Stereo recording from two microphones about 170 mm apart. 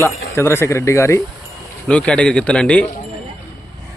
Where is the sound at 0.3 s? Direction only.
15° left (ahead or behind).